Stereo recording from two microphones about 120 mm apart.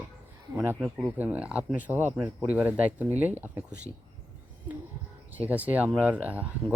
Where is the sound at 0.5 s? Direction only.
15° right (ahead or behind).